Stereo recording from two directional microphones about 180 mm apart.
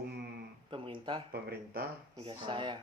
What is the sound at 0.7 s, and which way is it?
Speech, 25° right (ahead or behind).